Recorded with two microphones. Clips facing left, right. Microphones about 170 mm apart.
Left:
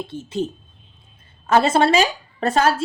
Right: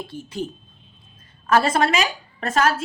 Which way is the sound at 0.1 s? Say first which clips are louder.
Left 5 dB; 25° left (ahead or behind).